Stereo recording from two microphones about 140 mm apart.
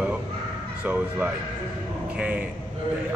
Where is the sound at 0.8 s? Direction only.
10° right (ahead or behind).